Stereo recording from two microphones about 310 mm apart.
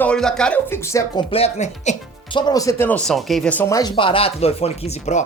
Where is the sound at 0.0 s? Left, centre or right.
Centre.